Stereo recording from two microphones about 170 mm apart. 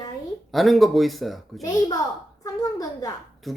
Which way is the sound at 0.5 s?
Centre (ahead or behind).